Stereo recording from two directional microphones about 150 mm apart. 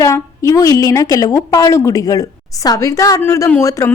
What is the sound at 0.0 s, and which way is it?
A woman's voice, 20° left (ahead or behind).